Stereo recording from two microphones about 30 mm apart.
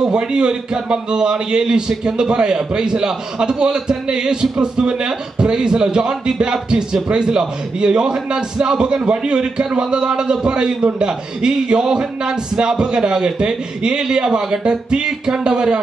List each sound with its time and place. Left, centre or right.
0.0 s a man's voice: right